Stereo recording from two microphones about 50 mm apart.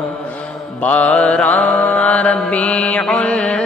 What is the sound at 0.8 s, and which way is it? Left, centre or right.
Mantra, left.